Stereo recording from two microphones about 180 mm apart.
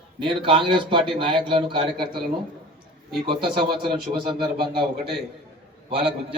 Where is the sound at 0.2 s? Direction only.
30° right (ahead or behind).